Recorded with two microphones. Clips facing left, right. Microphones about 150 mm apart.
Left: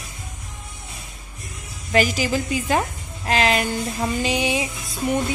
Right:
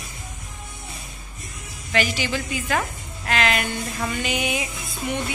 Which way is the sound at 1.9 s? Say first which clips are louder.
Left 4 dB; 40° left (ahead or behind).